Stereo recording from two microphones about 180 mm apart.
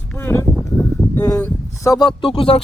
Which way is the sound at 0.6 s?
20° left (ahead or behind).